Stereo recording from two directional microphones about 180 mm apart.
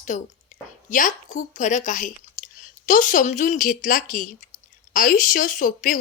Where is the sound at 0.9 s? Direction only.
45° left (ahead or behind).